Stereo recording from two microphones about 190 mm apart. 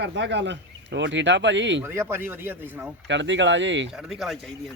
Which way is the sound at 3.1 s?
70° right (ahead or behind).